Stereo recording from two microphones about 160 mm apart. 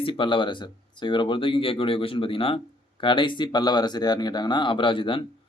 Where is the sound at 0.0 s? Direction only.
30° left (ahead or behind).